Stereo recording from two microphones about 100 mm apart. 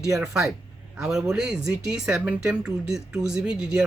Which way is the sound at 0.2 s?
5° right (ahead or behind).